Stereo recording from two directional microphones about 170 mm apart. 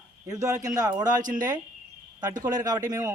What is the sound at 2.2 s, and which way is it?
Speech, 25° right (ahead or behind).